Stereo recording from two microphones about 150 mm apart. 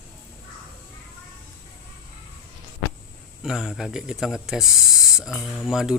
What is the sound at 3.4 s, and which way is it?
Speech, centre (ahead or behind).